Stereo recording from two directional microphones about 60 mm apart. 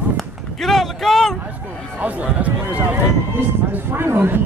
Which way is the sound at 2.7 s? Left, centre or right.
Right.